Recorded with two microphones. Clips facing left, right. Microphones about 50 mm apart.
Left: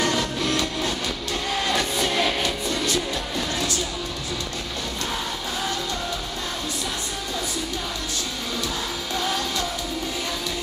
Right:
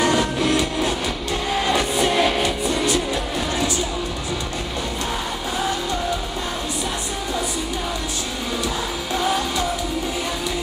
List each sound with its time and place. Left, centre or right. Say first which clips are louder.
0.0 s music: right 5 dB; centre
9.1 s music: right 5 dB; centre